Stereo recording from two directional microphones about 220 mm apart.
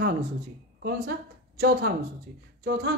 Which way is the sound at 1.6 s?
45° right (ahead or behind).